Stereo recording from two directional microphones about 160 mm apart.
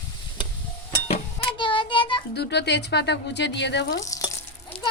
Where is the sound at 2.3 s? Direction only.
90° left.